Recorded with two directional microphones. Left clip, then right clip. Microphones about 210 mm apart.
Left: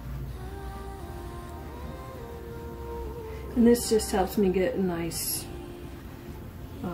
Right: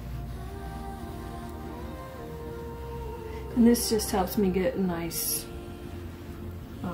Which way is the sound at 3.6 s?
20° right (ahead or behind).